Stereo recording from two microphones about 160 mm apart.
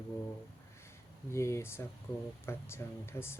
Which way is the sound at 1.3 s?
15° left (ahead or behind).